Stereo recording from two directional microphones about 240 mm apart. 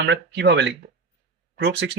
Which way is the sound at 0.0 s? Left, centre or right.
Right.